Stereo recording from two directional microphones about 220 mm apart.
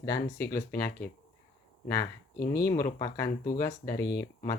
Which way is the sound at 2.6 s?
15° left (ahead or behind).